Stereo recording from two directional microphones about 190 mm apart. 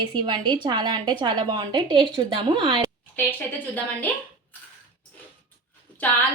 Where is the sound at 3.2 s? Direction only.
10° left (ahead or behind).